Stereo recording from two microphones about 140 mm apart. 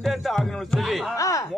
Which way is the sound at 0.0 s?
Centre (ahead or behind).